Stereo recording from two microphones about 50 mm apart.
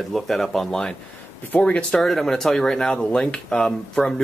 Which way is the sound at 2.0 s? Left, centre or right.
Centre.